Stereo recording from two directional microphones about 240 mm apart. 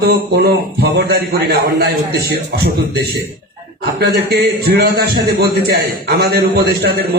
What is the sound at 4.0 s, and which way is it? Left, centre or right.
A man's voice, right.